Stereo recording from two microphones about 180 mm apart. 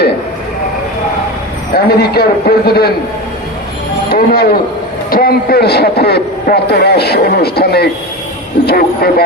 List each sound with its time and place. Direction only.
1.7 s a man's voice: 60° left (ahead or behind)
4.1 s a man's voice: 60° left (ahead or behind)